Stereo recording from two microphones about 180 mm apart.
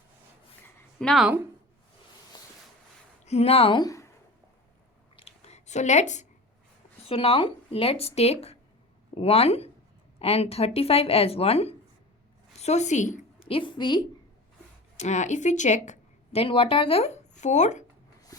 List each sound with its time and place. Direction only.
0.9 s a woman's voice: centre (ahead or behind)
3.2 s speech: 35° left (ahead or behind); by 4.1 s 20° left (ahead or behind)
5.1 s a sound: 35° left (ahead or behind)
7.0 s a woman's voice: 35° left (ahead or behind)
14.9 s a woman's voice: 40° left (ahead or behind)